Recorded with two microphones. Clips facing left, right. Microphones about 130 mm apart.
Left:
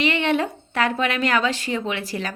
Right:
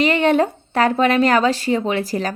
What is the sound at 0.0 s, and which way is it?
A woman's voice, 40° right (ahead or behind).